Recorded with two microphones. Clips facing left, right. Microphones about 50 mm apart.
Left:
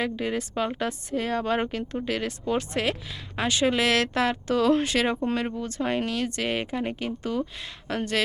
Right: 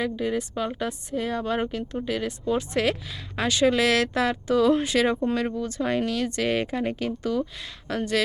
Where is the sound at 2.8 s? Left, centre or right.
Centre; by 5.0 s left.